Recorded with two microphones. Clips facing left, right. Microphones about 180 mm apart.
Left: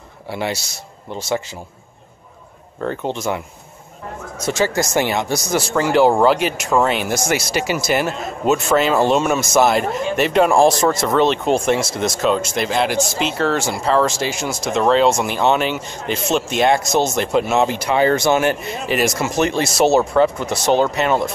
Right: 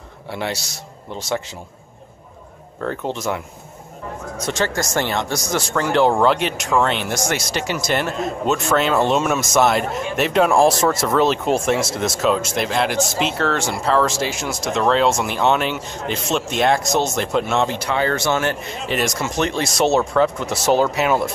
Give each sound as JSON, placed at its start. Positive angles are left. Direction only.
{"t": 0.3, "sound": "speech", "side_deg": 5}
{"t": 2.8, "sound": "speech", "side_deg": 0}